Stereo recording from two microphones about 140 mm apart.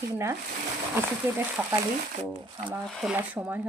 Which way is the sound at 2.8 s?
Centre (ahead or behind).